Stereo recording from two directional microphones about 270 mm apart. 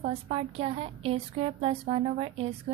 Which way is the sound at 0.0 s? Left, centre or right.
Right.